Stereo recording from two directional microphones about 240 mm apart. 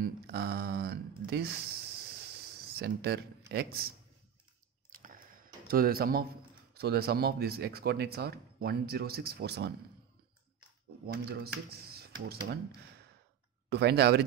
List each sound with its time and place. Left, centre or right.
0.0 s speech: right
4.8 s a sound: right
6.7 s speech: right
11.1 s speech: right
13.7 s speech: right